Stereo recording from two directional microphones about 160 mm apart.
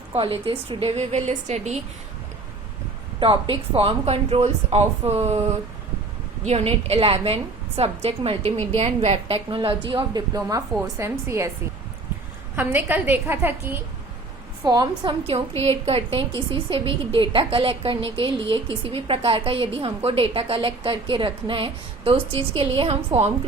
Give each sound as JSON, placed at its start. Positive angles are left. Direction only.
{"t": 0.1, "sound": "a woman's voice", "side_deg": -35}
{"t": 3.2, "sound": "a woman's voice", "side_deg": -30}
{"t": 12.5, "sound": "a woman's voice", "side_deg": -10}
{"t": 14.6, "sound": "a woman's voice", "side_deg": -25}
{"t": 15.6, "sound": "a woman's voice", "side_deg": -35}